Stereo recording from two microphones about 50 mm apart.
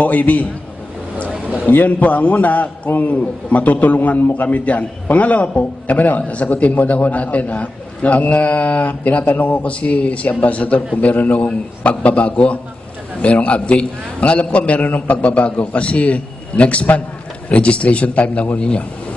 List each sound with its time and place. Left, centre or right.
0.0 s a man's voice: left
1.7 s a man's voice: left